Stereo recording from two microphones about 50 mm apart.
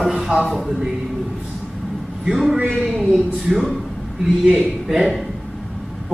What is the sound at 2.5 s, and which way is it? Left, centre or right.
Speech, right.